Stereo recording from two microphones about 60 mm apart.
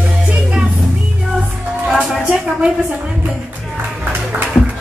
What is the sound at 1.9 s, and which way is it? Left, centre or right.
Music, centre.